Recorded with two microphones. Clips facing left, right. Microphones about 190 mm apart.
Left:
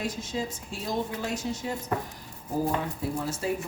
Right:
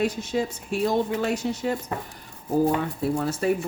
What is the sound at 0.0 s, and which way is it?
Speech, 65° right (ahead or behind).